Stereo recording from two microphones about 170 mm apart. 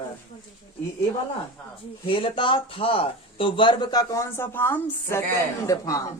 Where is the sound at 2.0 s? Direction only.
30° left (ahead or behind).